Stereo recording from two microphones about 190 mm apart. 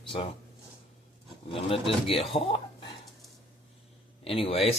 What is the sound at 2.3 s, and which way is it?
Speech, 30° left (ahead or behind).